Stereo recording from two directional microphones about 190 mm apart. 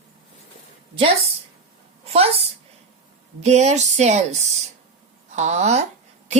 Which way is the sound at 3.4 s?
35° right (ahead or behind).